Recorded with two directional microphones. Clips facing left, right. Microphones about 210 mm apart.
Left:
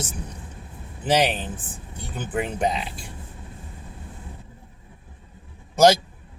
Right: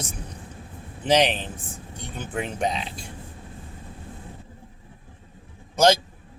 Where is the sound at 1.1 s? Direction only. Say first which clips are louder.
Right 1 dB; 5° left (ahead or behind).